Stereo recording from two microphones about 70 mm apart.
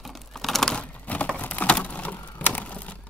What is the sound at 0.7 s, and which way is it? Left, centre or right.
Typing, centre.